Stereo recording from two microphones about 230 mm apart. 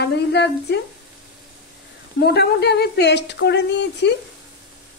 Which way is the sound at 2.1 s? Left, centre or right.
Left.